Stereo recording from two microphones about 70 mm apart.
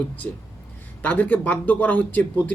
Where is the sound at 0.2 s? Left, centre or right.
Left.